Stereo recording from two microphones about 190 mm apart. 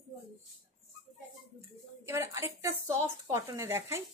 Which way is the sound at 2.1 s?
15° right (ahead or behind).